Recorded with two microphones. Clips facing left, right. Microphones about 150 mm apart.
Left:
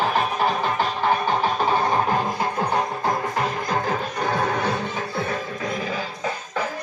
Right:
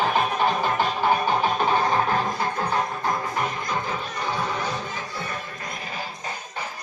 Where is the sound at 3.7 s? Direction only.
45° left (ahead or behind).